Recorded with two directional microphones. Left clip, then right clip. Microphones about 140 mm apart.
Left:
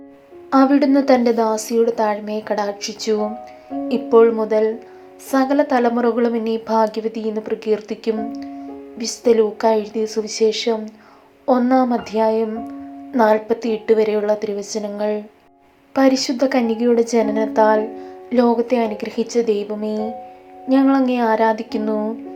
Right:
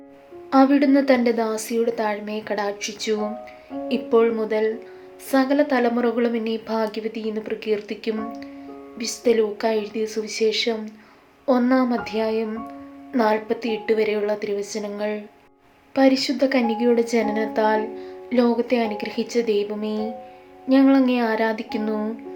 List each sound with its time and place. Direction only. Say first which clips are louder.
0.5 s a woman's voice: left 2 dB; 15° left (ahead or behind)